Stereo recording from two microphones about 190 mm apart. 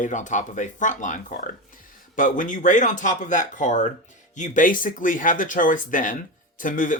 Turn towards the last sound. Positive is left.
turn(degrees=45)  # may be behind; listen again after turning